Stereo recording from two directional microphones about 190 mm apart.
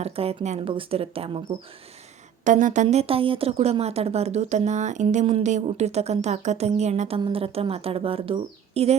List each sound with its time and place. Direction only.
0.0 s speech: 30° right (ahead or behind)
2.4 s speech: 40° right (ahead or behind)
7.2 s speech: 25° right (ahead or behind)